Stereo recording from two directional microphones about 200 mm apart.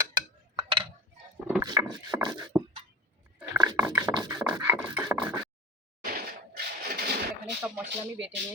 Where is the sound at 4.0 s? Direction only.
20° right (ahead or behind).